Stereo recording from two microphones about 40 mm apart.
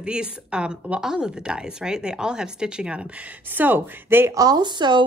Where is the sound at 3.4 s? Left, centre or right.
Right.